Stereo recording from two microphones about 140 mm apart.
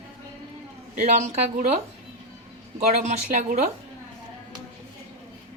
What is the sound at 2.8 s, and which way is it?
Speech, 55° right (ahead or behind).